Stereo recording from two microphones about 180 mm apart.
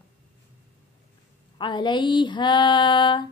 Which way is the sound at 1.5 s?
25° left (ahead or behind).